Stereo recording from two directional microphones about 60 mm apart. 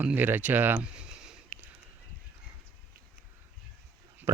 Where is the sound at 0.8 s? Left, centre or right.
Centre.